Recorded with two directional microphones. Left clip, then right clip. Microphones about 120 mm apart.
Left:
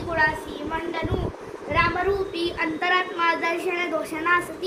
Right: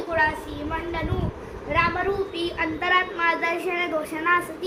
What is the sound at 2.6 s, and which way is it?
Speech, 80° left.